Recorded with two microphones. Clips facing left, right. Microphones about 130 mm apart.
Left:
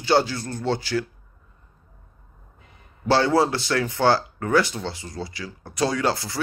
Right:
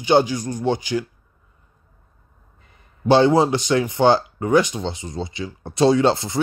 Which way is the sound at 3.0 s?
20° right (ahead or behind).